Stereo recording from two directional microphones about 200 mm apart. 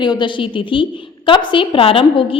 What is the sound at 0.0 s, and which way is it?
A woman's voice, 20° left (ahead or behind).